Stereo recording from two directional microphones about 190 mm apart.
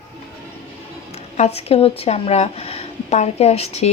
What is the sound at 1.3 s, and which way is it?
A woman's voice, 35° left (ahead or behind).